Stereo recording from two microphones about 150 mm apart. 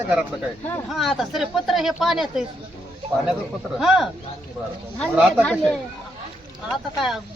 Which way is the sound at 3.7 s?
Centre (ahead or behind).